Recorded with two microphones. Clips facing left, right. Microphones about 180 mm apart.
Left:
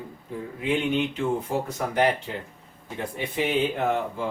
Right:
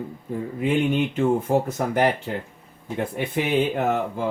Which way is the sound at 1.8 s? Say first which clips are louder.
Right 4 dB; 45° right (ahead or behind).